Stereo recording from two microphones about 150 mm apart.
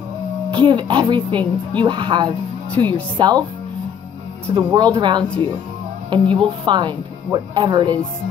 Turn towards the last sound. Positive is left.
turn(degrees=-30)  # may be behind; listen again after turning